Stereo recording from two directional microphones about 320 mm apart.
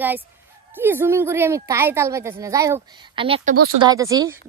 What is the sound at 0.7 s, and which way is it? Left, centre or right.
A woman's voice, centre.